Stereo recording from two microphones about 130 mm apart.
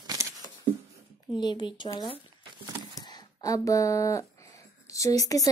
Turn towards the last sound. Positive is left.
turn(degrees=25)  # may be behind; listen again after turning